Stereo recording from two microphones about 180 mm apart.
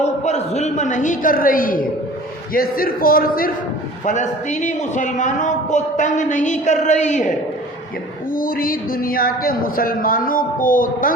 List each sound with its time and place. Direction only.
0.0 s a woman's voice: 40° left (ahead or behind); by 3.5 s 55° left (ahead or behind)
4.0 s speech: 45° left (ahead or behind)